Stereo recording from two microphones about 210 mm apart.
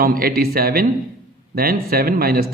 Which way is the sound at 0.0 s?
45° right (ahead or behind).